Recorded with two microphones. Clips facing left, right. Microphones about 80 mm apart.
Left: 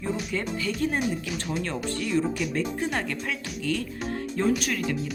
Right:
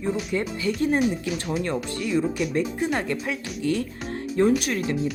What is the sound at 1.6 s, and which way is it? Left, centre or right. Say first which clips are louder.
Speech: right 2 dB; centre.